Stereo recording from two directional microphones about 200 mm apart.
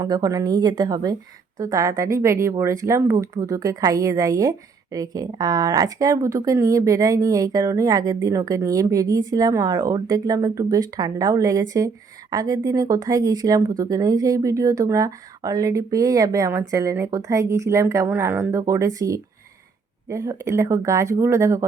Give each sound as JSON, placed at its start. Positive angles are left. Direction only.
{"t": 0.0, "sound": "a woman's voice", "side_deg": -20}